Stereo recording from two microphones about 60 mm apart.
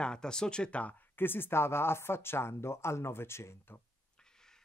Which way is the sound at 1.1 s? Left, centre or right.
Left.